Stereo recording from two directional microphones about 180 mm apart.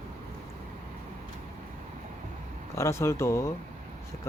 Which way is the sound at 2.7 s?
15° left (ahead or behind).